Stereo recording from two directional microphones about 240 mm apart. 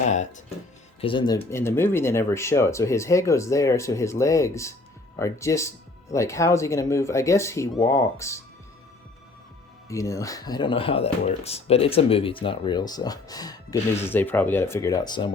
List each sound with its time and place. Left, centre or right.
0.1 s speech: left
1.0 s speech: centre
9.9 s speech: centre